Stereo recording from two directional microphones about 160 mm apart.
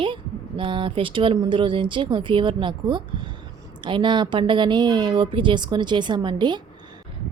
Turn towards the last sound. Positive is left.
turn(degrees=-30)  # may be behind; listen again after turning